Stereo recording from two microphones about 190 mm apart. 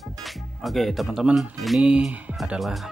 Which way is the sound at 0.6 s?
Centre (ahead or behind).